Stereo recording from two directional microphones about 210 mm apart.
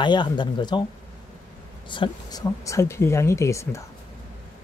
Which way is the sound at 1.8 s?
20° left (ahead or behind).